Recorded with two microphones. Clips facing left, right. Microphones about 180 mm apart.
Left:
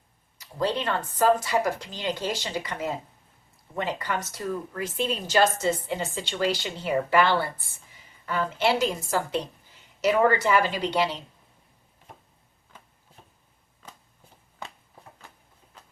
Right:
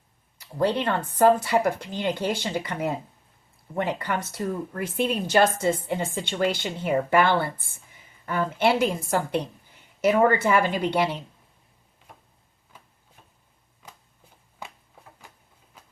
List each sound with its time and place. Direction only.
0.3 s speech: 60° right (ahead or behind)
4.0 s a woman's voice: 55° right (ahead or behind)
14.6 s a sound: 10° right (ahead or behind)